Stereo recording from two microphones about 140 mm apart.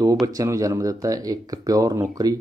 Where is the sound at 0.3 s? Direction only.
25° right (ahead or behind).